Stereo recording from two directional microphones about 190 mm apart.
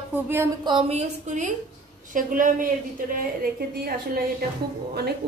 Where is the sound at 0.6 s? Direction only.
30° right (ahead or behind); by 2.7 s 45° right (ahead or behind).